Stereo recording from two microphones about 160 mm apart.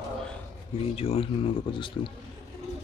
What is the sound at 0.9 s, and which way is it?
Speech, 40° left (ahead or behind).